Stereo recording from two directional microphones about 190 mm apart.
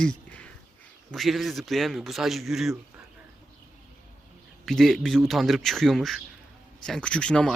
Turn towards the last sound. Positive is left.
turn(degrees=5)  # may be behind; listen again after turning